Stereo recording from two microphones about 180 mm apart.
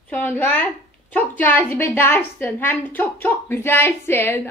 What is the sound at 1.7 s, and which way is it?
A woman's voice, 15° left (ahead or behind).